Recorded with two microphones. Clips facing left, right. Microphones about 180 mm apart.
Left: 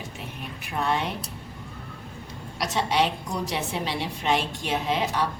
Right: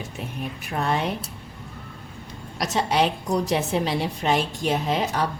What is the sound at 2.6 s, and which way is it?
A woman's voice, 40° right (ahead or behind).